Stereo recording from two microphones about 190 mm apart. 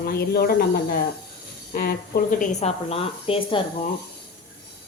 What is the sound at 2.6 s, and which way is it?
A woman's voice, 35° left (ahead or behind).